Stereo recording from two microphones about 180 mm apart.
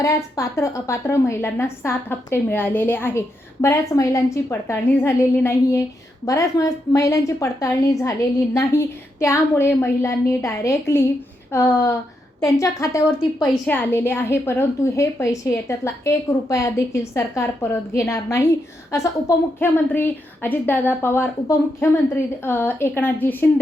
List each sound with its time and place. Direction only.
0.0 s a woman's voice: 15° left (ahead or behind)